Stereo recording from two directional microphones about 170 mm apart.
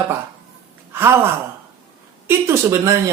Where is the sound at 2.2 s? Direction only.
15° right (ahead or behind).